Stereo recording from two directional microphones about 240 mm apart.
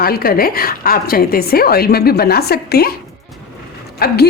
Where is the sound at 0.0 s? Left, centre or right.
Left.